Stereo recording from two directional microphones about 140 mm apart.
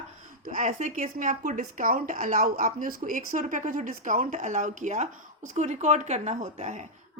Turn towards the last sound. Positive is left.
turn(degrees=-55)  # may be behind; listen again after turning